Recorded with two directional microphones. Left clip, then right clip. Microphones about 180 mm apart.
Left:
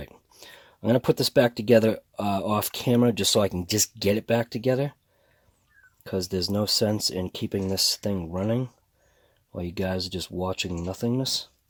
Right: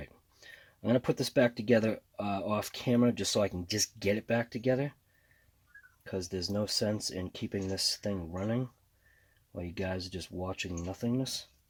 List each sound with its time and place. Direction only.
0.0 s speech: 50° left (ahead or behind)
6.0 s speech: 45° left (ahead or behind)